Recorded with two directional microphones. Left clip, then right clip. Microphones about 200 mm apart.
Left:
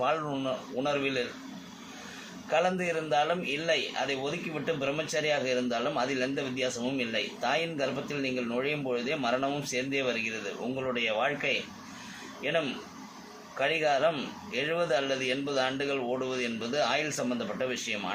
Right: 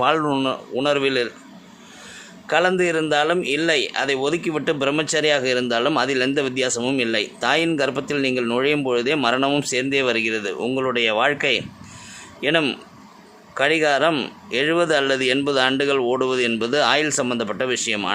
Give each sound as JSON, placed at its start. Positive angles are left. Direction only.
{"t": 0.0, "sound": "a man's voice", "side_deg": -55}
{"t": 2.5, "sound": "a man's voice", "side_deg": -55}